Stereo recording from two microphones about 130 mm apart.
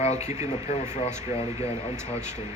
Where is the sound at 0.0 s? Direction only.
60° left (ahead or behind).